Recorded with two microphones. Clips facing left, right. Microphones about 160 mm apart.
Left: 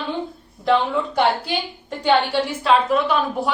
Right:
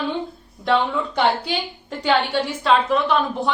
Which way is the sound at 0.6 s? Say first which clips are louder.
Left 1 dB; 5° left (ahead or behind).